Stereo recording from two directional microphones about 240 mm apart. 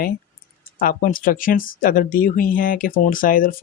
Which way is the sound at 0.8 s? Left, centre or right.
Left.